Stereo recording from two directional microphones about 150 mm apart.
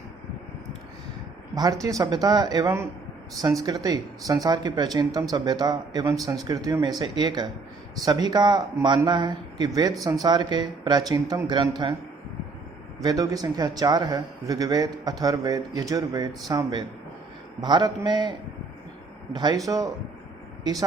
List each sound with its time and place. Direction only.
1.8 s a man's voice: 20° right (ahead or behind)
13.0 s a man's voice: 25° right (ahead or behind)